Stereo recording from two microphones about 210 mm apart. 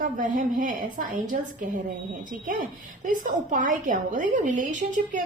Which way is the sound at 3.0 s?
40° right (ahead or behind).